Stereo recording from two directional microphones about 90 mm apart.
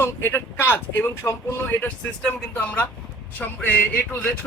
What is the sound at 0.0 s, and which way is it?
Speech, 30° left (ahead or behind).